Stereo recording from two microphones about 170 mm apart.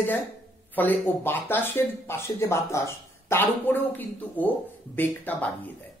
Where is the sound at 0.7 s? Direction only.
10° left (ahead or behind).